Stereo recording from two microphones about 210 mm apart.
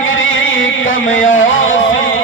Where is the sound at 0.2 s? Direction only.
65° left (ahead or behind).